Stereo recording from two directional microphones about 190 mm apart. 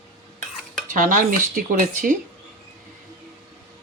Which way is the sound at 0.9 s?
45° right (ahead or behind).